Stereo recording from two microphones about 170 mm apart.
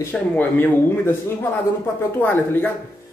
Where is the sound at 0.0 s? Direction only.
10° left (ahead or behind).